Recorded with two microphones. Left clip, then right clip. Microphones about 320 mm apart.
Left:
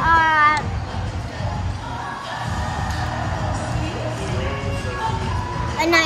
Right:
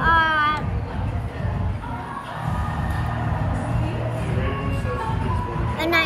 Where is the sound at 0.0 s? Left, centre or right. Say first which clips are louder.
Left 3 dB; centre.